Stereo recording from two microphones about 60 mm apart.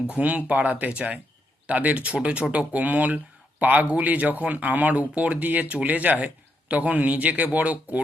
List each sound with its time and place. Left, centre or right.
0.1 s speech: right